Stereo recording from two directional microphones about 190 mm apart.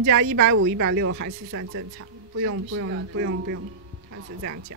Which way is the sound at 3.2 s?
80° right.